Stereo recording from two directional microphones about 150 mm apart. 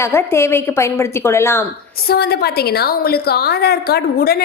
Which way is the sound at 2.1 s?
90° left.